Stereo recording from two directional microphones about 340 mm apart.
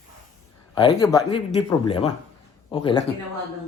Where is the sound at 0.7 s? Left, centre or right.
Centre.